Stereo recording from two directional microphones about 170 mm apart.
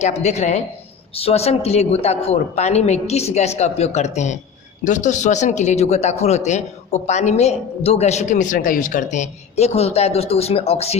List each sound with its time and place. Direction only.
0.0 s speech: 40° left (ahead or behind)